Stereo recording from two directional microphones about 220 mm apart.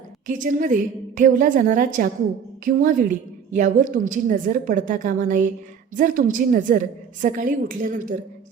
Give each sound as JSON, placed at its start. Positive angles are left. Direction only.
{"t": 0.3, "sound": "a woman's voice", "side_deg": -35}